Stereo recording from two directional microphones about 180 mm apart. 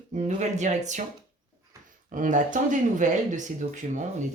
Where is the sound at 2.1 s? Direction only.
45° right (ahead or behind).